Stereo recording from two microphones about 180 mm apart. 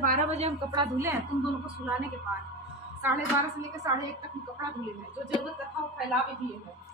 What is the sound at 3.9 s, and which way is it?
Speech, 20° right (ahead or behind).